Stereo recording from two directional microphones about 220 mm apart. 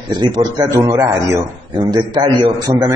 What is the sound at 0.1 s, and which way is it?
Speech, 20° right (ahead or behind).